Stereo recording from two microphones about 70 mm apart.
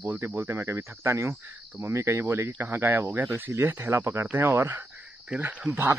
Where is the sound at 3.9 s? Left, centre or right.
Right.